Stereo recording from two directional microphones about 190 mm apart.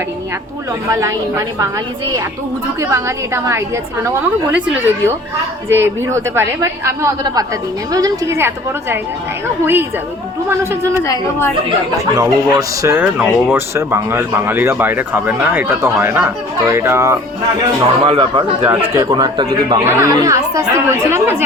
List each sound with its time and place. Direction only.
0.9 s speech: 15° right (ahead or behind)
2.9 s speech: 15° right (ahead or behind)
11.0 s a woman's voice: 15° left (ahead or behind)
12.1 s speech: 20° right (ahead or behind)
18.0 s a man's voice: 30° right (ahead or behind); by 21.4 s 10° right (ahead or behind)